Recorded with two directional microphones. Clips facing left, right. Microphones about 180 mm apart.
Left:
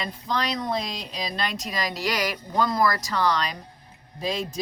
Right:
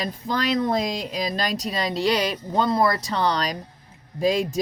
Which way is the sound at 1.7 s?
30° right (ahead or behind).